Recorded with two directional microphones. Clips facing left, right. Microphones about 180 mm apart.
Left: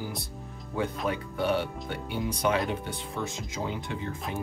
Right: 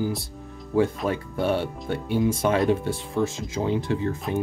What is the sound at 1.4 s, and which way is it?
Speech, 30° right (ahead or behind).